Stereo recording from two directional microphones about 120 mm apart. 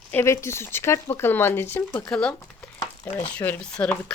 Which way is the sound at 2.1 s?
10° left (ahead or behind).